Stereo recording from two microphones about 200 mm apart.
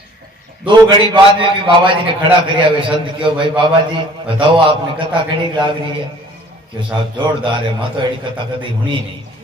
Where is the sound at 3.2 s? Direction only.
25° right (ahead or behind).